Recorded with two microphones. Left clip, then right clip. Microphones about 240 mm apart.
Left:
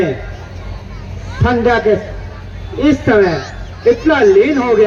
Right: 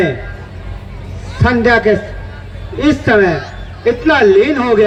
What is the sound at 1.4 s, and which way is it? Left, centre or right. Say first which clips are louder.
A man's voice: right 2 dB; right.